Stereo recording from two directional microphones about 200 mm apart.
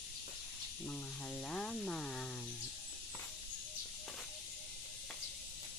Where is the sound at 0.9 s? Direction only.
5° left (ahead or behind).